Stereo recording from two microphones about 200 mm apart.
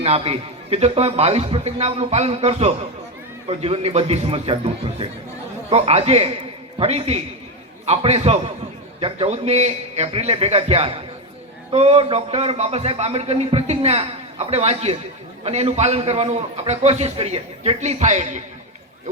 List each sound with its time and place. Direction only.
0.0 s a man's voice: 30° right (ahead or behind)